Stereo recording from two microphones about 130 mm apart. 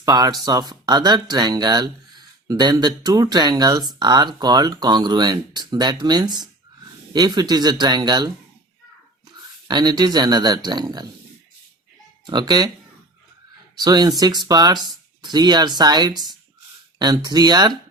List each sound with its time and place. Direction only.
0.0 s speech: 30° right (ahead or behind)
9.6 s speech: 30° right (ahead or behind)
12.2 s speech: 35° right (ahead or behind)
13.7 s speech: 30° right (ahead or behind)